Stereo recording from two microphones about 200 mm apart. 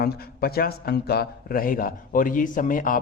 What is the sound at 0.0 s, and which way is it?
A man's voice, 50° left (ahead or behind).